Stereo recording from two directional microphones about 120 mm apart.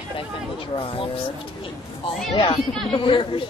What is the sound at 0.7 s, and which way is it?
Speech, 50° left (ahead or behind).